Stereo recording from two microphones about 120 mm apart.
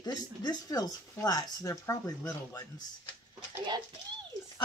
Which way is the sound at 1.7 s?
20° left (ahead or behind).